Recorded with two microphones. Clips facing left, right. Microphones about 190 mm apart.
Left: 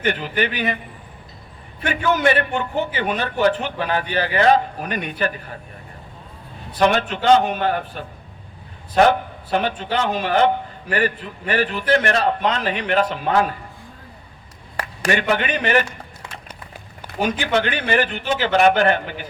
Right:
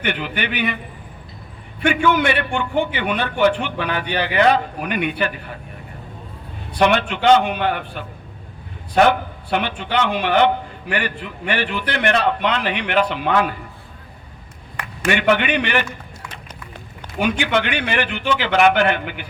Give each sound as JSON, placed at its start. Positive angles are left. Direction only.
{"t": 0.0, "sound": "a man's voice", "side_deg": 40}
{"t": 1.8, "sound": "a man's voice", "side_deg": 40}
{"t": 6.8, "sound": "a man's voice", "side_deg": 40}
{"t": 9.0, "sound": "a man's voice", "side_deg": 40}
{"t": 14.8, "sound": "a man's voice", "side_deg": 40}
{"t": 17.2, "sound": "a man's voice", "side_deg": 40}